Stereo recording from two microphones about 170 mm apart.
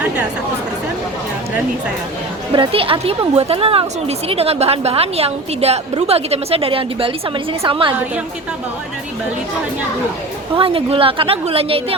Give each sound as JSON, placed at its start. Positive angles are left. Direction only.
{"t": 2.5, "sound": "a woman's voice", "side_deg": -35}
{"t": 10.6, "sound": "a woman's voice", "side_deg": -35}